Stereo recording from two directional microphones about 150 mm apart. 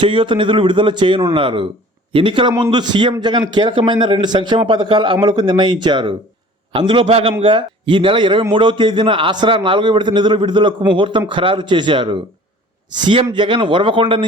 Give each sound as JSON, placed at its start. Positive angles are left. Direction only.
{"t": 0.0, "sound": "speech", "side_deg": -35}